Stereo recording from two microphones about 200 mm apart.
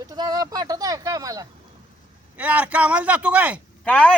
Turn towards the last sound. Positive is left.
turn(degrees=5)  # may be behind; listen again after turning